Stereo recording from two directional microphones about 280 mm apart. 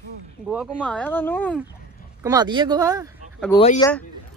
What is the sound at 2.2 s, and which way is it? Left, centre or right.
Speech, centre.